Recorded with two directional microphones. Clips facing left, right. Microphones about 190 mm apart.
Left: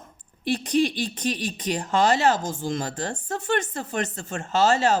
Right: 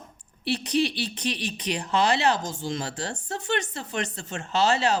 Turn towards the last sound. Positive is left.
turn(degrees=45)  # may be behind; listen again after turning